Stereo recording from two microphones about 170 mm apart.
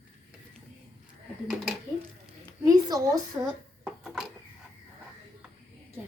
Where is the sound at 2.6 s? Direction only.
20° right (ahead or behind).